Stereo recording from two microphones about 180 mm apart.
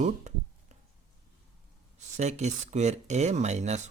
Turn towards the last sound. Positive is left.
turn(degrees=-40)  # may be behind; listen again after turning